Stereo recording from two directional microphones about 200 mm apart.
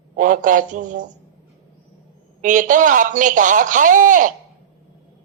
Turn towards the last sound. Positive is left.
turn(degrees=-40)  # may be behind; listen again after turning